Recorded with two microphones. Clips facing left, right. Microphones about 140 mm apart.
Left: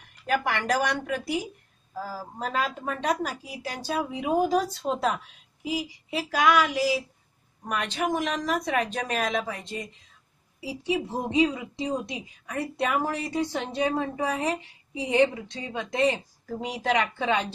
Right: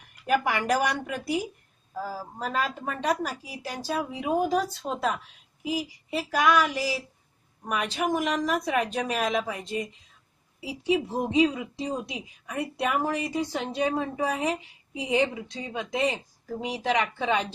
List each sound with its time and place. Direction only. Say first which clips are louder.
0.3 s a woman's voice: right 1 dB; 5° right (ahead or behind)
10.9 s a woman's voice: right 2 dB; centre (ahead or behind)